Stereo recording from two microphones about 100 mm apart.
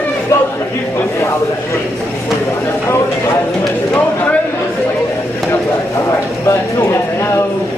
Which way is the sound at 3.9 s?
15° left (ahead or behind).